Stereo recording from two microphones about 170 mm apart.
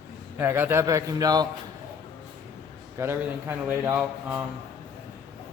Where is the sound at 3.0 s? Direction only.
15° right (ahead or behind).